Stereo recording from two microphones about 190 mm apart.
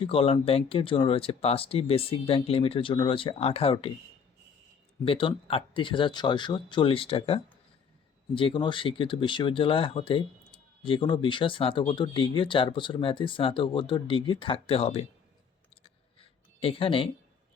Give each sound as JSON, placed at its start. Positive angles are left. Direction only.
{"t": 0.0, "sound": "speech", "side_deg": 30}
{"t": 5.0, "sound": "speech", "side_deg": 30}
{"t": 15.8, "sound": "a sound", "side_deg": 30}